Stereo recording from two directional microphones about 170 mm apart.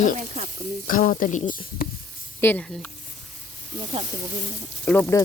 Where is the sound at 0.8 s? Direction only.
55° left (ahead or behind).